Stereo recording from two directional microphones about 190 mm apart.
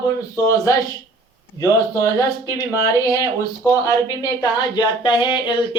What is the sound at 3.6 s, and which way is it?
Speech, 15° left (ahead or behind).